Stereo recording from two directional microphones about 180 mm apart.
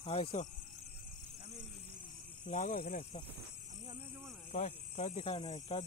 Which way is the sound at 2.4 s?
45° left (ahead or behind).